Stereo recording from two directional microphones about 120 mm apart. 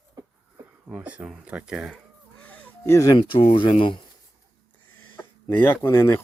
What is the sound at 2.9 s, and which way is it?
Speech, 25° left (ahead or behind).